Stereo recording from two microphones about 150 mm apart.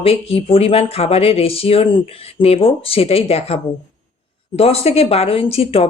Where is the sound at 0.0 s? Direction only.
40° left (ahead or behind).